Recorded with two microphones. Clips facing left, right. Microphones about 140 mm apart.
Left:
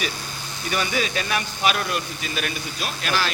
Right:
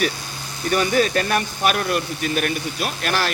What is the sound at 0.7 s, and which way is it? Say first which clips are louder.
Speech: right 7 dB; 45° right (ahead or behind).